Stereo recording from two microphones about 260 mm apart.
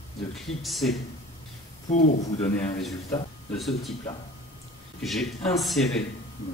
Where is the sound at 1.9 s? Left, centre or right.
Left.